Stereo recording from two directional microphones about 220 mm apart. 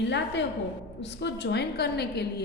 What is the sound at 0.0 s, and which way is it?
A woman's voice, 55° left (ahead or behind).